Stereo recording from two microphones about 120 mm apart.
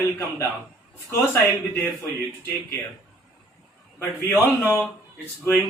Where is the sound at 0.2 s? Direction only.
25° left (ahead or behind).